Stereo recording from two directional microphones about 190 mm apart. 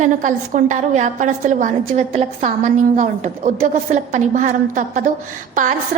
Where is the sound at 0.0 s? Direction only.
40° right (ahead or behind).